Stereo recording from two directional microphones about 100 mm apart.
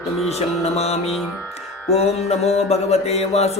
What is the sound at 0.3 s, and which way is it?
Speech, 90° left.